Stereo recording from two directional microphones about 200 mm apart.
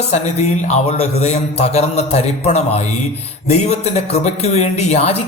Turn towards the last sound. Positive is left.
turn(degrees=30)  # may be behind; listen again after turning